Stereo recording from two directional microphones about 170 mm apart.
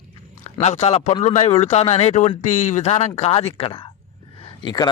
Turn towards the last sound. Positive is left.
turn(degrees=25)  # may be behind; listen again after turning